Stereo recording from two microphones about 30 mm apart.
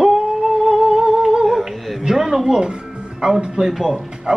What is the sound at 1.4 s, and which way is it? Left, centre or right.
Humming, centre.